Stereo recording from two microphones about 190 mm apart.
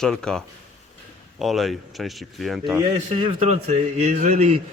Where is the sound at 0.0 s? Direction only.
5° left (ahead or behind).